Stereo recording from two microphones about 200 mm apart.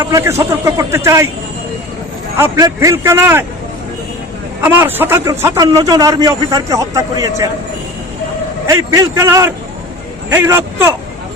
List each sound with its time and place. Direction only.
0.1 s a man's voice: 15° right (ahead or behind)
2.4 s a man's voice: 15° right (ahead or behind)
4.6 s a man's voice: 10° right (ahead or behind)
8.6 s a man's voice: 15° right (ahead or behind)